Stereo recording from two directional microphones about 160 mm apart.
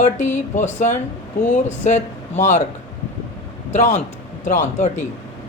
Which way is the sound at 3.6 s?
50° left (ahead or behind).